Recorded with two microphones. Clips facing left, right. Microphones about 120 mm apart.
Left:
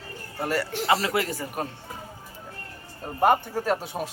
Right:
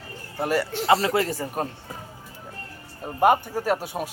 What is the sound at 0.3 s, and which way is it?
Speech, 15° right (ahead or behind).